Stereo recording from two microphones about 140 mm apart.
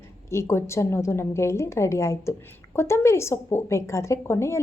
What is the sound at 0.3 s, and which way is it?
A woman's voice, 20° left (ahead or behind).